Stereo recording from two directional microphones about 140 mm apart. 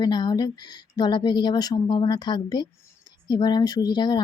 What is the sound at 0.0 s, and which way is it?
Speech, 30° left (ahead or behind).